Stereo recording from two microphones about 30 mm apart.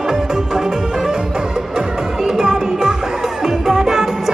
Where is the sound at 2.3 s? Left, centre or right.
Right.